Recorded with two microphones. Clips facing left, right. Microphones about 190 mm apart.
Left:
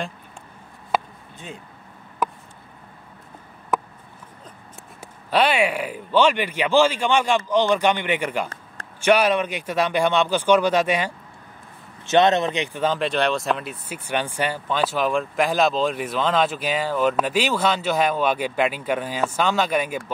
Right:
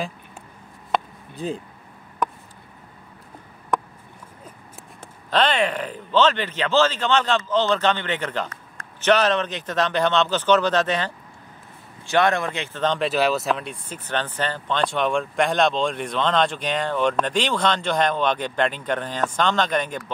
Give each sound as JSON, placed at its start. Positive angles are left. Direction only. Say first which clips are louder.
{"t": 0.9, "sound": "chop", "louder": "even", "side_deg": 5}
{"t": 1.3, "sound": "speech", "louder": "right 10 dB", "side_deg": -35}
{"t": 2.2, "sound": "a sound", "louder": "even", "side_deg": 5}
{"t": 3.7, "sound": "a sound", "louder": "even", "side_deg": 5}
{"t": 5.0, "sound": "speech", "louder": "left 1 dB", "side_deg": 10}
{"t": 12.0, "sound": "speech", "louder": "left 3 dB", "side_deg": 20}